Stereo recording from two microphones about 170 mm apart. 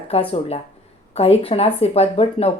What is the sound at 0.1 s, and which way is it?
Speech, 35° left (ahead or behind).